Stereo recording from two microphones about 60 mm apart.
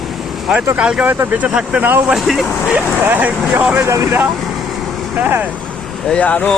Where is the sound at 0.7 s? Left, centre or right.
Centre.